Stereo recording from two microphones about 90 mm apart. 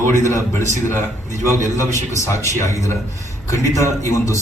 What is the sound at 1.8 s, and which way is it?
A man's voice, 35° left (ahead or behind).